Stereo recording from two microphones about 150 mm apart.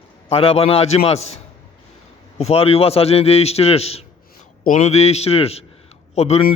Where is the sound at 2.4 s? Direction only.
40° left (ahead or behind).